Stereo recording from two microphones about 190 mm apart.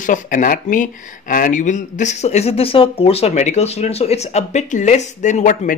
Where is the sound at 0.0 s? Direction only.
45° left (ahead or behind).